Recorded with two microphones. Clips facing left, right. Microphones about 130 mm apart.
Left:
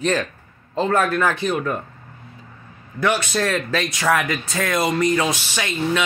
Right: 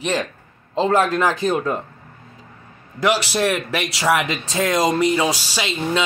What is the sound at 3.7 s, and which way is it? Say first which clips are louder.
Speech: even; 15° right (ahead or behind).